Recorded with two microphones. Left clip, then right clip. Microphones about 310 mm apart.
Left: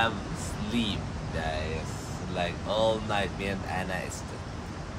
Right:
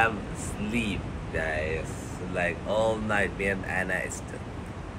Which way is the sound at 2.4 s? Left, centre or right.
Centre.